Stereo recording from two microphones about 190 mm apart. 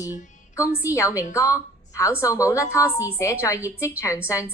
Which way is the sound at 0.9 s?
15° left (ahead or behind).